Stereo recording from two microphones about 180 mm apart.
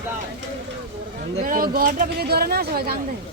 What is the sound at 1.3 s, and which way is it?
Speech, 50° right (ahead or behind).